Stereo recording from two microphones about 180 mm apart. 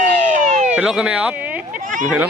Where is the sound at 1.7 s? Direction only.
45° right (ahead or behind).